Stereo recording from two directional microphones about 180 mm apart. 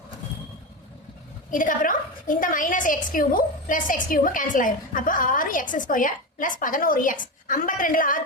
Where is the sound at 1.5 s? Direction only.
45° left (ahead or behind).